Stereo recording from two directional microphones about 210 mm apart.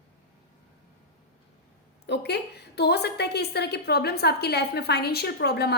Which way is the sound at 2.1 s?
50° left (ahead or behind).